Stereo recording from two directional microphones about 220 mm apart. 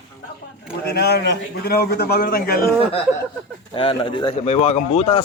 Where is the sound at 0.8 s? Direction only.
45° left (ahead or behind).